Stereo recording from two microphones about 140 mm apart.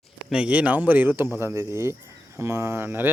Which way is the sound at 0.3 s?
10° right (ahead or behind).